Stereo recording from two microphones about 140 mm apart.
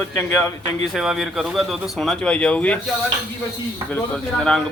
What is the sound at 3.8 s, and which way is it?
Speech, 10° left (ahead or behind).